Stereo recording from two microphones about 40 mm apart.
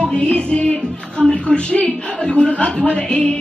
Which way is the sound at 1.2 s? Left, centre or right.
Left.